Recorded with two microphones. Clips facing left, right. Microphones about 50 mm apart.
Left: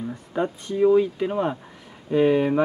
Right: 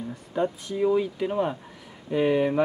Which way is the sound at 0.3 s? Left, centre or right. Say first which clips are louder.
Left 3 dB; centre.